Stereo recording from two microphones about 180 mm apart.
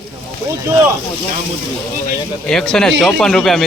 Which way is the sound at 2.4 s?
5° left (ahead or behind).